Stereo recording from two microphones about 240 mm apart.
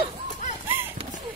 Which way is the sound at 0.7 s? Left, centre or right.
Centre.